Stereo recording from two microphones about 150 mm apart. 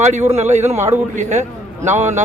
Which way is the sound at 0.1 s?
50° right (ahead or behind).